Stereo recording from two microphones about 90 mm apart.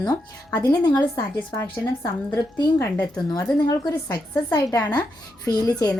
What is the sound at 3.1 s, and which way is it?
A woman's voice, 40° left (ahead or behind).